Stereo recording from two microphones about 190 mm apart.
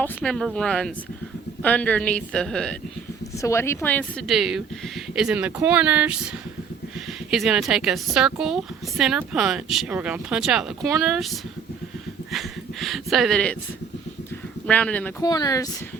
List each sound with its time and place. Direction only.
0.2 s a woman's voice: centre (ahead or behind)
7.3 s a woman's voice: centre (ahead or behind)
12.3 s speech: centre (ahead or behind)
14.7 s speech: 5° left (ahead or behind)
15.2 s speech: 20° left (ahead or behind)